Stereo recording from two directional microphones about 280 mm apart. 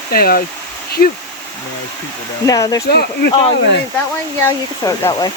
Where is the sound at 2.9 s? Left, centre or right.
Left.